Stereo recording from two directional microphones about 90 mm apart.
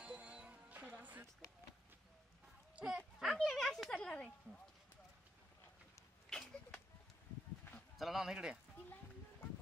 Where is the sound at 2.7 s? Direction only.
5° right (ahead or behind).